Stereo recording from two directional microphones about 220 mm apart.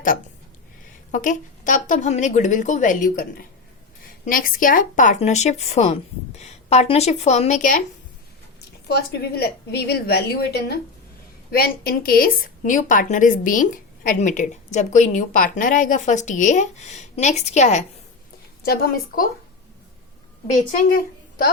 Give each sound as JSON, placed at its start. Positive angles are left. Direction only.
{"t": 1.1, "sound": "a woman's voice", "side_deg": 35}
{"t": 8.9, "sound": "a woman's voice", "side_deg": 45}
{"t": 18.6, "sound": "a woman's voice", "side_deg": 45}
{"t": 20.5, "sound": "a woman's voice", "side_deg": 35}